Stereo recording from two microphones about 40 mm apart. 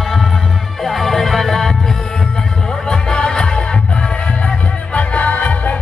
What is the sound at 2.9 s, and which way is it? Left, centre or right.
Music, centre.